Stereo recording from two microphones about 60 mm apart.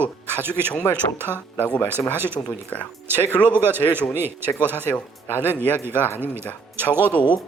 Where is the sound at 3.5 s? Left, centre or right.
Right.